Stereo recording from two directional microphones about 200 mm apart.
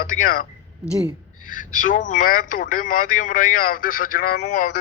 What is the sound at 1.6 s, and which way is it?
A man's voice, 40° left (ahead or behind).